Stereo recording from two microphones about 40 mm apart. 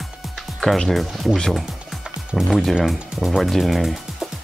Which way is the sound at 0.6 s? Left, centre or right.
Left.